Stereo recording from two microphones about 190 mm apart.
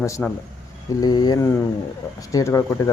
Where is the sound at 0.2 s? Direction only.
10° left (ahead or behind).